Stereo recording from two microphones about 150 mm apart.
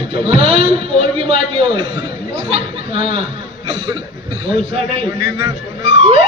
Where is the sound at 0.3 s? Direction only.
40° right (ahead or behind).